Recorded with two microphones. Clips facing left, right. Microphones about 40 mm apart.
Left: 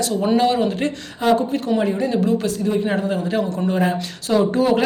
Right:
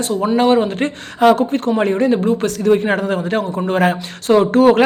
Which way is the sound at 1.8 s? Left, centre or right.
Right.